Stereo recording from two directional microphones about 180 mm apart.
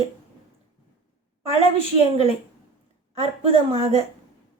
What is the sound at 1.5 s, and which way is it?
Speech, 35° right (ahead or behind).